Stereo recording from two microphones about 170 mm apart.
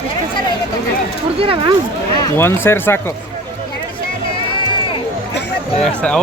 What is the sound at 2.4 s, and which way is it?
Speech, 15° left (ahead or behind).